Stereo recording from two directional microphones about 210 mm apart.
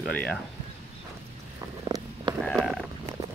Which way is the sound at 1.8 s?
20° right (ahead or behind).